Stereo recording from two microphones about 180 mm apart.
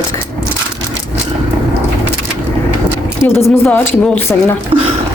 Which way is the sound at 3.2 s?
10° left (ahead or behind).